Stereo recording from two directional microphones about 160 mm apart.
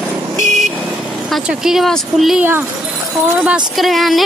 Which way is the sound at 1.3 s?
5° right (ahead or behind).